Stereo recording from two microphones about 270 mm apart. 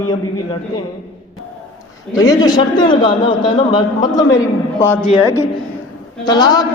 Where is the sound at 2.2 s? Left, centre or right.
Centre.